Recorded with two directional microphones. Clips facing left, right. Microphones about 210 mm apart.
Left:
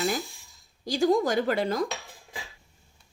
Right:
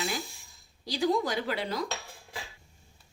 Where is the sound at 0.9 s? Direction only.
45° left (ahead or behind).